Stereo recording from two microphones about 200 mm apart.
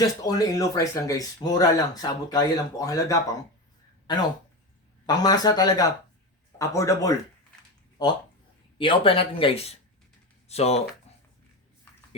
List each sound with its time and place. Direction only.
0.2 s speech: 20° left (ahead or behind)